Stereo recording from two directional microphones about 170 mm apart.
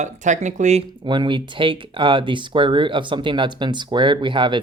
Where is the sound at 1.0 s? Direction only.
25° right (ahead or behind).